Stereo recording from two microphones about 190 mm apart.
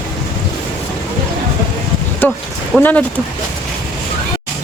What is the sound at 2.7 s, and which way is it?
Speech, 5° left (ahead or behind).